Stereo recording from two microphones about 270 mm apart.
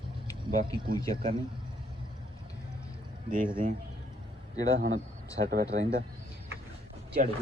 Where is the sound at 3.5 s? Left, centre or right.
Centre.